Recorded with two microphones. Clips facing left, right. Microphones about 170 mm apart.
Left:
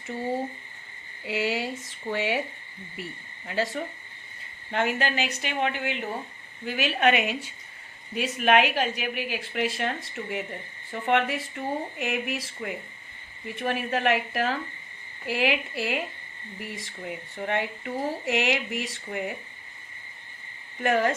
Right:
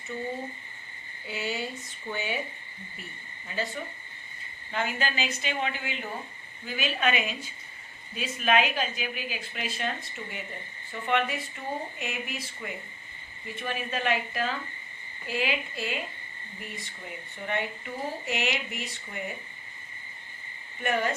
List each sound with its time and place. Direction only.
1.3 s speech: 90° left
4.7 s a woman's voice: 70° left (ahead or behind); by 16.9 s 90° left
17.4 s speech: 75° left (ahead or behind); by 19.2 s 90° left
20.8 s a woman's voice: 75° left (ahead or behind)